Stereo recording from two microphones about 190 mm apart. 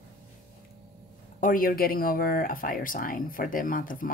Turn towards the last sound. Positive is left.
turn(degrees=45)  # may be behind; listen again after turning